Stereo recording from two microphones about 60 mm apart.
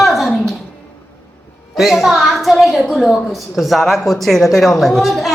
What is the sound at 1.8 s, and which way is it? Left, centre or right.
A woman's voice, centre.